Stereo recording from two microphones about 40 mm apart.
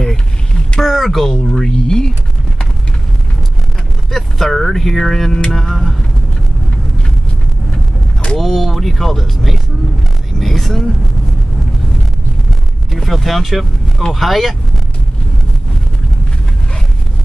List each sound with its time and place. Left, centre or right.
0.0 s a sound: centre
0.7 s a sound: centre
1.3 s speech: centre
4.1 s speech: centre
8.4 s speech: centre
12.9 s speech: centre